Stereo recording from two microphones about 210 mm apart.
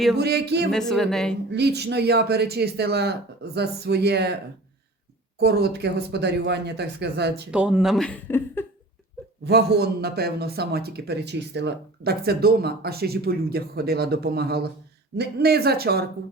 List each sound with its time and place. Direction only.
0.2 s a man's voice: 50° right (ahead or behind)
0.7 s speech: centre (ahead or behind)
1.5 s a man's voice: 50° right (ahead or behind)
5.4 s a man's voice: 50° right (ahead or behind)
7.5 s speech: 5° right (ahead or behind)
9.4 s a man's voice: 50° right (ahead or behind)